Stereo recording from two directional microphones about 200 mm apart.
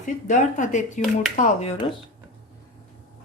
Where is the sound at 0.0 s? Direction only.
40° left (ahead or behind).